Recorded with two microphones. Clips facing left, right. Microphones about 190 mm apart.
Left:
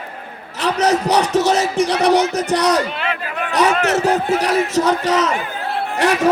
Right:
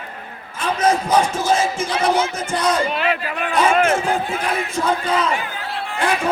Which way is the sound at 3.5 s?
70° left (ahead or behind).